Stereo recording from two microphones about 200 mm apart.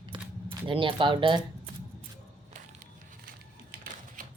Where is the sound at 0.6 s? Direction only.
25° right (ahead or behind).